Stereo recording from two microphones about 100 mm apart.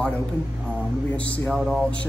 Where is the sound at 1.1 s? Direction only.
15° left (ahead or behind).